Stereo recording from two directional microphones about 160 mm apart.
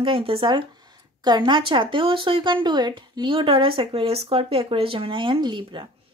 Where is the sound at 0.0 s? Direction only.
35° right (ahead or behind).